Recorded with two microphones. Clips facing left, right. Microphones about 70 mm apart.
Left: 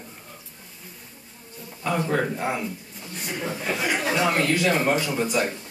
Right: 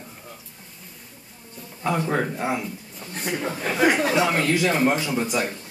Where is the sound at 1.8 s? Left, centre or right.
Centre.